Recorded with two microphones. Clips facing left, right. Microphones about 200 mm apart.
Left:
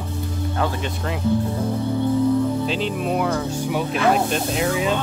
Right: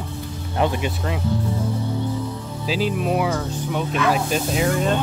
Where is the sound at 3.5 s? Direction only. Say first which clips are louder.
Left 2 dB; 10° left (ahead or behind).